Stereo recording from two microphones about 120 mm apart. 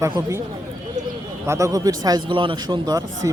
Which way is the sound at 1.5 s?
25° right (ahead or behind).